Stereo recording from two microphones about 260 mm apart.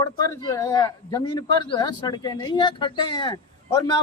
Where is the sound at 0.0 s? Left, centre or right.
Centre.